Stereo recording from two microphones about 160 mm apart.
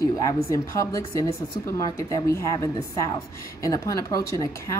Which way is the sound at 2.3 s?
15° left (ahead or behind).